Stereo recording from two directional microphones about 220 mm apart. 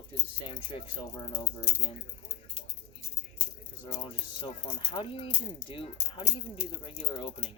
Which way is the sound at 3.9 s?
25° left (ahead or behind).